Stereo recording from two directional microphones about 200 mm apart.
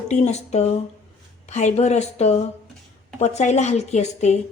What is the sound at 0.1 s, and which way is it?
Speech, 35° left (ahead or behind).